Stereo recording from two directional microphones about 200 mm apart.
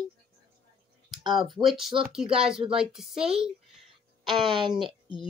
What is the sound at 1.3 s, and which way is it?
Speech, centre (ahead or behind).